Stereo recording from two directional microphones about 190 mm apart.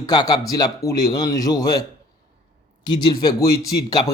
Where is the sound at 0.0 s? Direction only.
20° left (ahead or behind).